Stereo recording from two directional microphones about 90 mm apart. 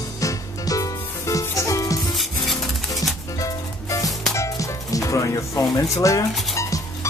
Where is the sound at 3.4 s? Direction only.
40° left (ahead or behind).